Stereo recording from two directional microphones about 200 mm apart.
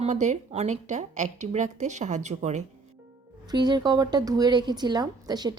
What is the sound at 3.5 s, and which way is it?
Speech, 20° right (ahead or behind).